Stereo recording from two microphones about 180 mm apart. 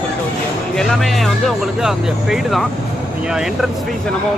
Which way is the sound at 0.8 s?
5° left (ahead or behind).